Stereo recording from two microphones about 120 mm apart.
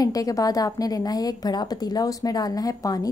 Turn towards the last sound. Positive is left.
turn(degrees=30)  # may be behind; listen again after turning